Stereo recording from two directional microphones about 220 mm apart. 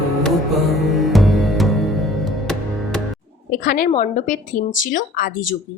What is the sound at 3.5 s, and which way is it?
Speech, 40° left (ahead or behind).